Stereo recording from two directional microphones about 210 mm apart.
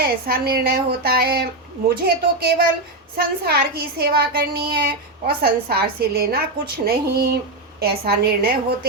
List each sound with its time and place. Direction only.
0.0 s speech: 45° right (ahead or behind)